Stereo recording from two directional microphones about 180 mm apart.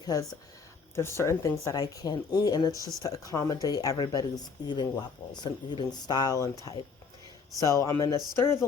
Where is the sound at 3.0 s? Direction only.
20° left (ahead or behind).